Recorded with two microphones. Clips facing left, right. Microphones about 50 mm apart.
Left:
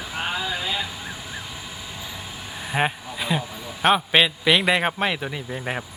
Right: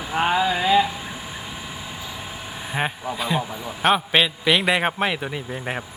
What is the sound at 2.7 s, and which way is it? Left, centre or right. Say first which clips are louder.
A man's voice: left 1 dB; centre.